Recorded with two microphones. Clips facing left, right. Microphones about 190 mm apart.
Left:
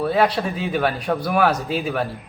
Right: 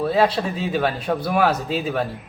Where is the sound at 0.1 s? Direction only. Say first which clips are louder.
Even; 25° right (ahead or behind).